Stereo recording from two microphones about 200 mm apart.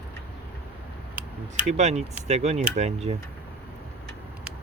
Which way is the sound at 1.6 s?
35° right (ahead or behind).